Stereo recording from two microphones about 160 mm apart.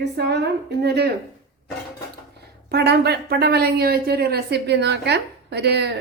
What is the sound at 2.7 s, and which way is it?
A woman's voice, 90° right.